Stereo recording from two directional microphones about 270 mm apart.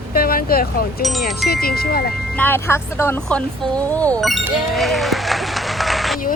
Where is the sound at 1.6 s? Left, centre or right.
Left.